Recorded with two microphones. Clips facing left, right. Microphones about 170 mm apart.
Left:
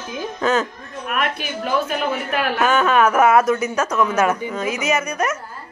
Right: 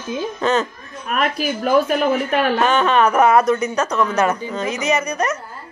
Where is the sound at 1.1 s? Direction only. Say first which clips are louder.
Right 4 dB; 35° right (ahead or behind).